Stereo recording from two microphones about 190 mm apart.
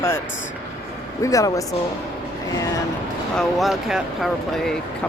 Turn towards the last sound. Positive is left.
turn(degrees=0)  # may be behind; listen again after turning